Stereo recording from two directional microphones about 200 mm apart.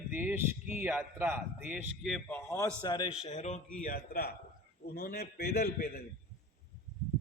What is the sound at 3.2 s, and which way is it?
A man's voice, 35° left (ahead or behind).